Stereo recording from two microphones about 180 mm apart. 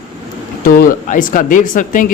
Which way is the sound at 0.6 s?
50° left (ahead or behind).